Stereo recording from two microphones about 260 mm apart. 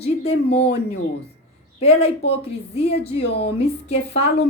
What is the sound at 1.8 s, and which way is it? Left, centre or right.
Speech, left.